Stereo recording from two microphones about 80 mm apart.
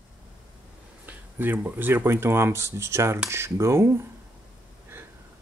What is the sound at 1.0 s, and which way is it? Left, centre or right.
Speech, right.